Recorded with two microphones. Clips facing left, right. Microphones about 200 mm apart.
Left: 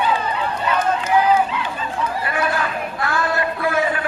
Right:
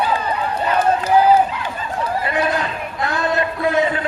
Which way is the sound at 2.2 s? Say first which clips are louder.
Right 2 dB; 20° right (ahead or behind).